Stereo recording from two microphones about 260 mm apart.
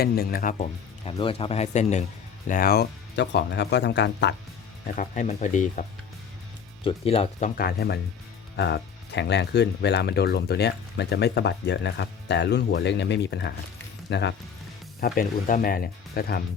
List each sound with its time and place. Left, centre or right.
0.0 s speech: left
4.9 s speech: left
6.8 s speech: left